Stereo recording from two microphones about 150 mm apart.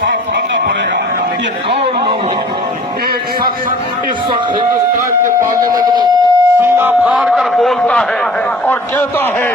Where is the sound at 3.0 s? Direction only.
80° right.